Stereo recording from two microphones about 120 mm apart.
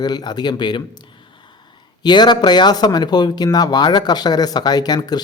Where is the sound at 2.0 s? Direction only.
40° left (ahead or behind).